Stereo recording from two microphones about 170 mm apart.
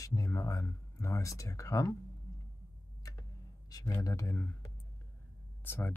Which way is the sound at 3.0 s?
20° left (ahead or behind).